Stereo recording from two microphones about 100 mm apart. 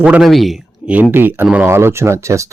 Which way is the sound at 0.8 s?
15° right (ahead or behind).